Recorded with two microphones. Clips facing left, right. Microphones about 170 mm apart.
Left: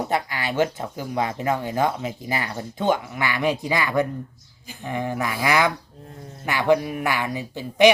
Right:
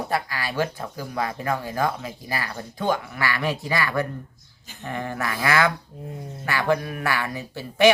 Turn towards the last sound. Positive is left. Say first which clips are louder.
# left 2 dB
turn(degrees=15)  # may be behind; listen again after turning